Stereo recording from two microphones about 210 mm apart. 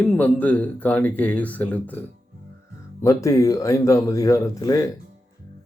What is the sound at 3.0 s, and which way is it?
A man's voice, 15° left (ahead or behind).